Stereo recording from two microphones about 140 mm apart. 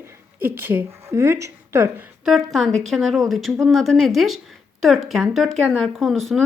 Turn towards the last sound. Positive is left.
turn(degrees=0)  # may be behind; listen again after turning